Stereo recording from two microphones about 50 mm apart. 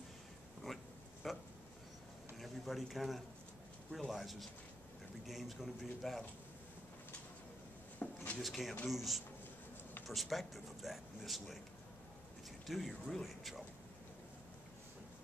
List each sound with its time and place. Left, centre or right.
0.7 s a sound: centre
4.1 s speech: centre
8.0 s drawer open or close: left
8.4 s speech: centre
12.6 s speech: centre